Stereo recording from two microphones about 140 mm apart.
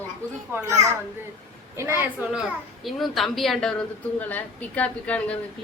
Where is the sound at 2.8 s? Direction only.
Centre (ahead or behind).